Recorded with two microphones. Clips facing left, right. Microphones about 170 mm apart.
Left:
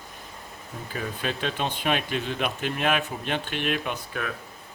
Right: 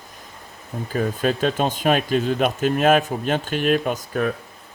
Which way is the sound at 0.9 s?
45° right (ahead or behind).